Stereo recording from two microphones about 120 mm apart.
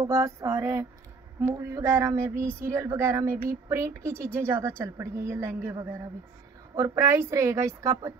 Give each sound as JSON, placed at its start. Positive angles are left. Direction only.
{"t": 0.0, "sound": "speech", "side_deg": -25}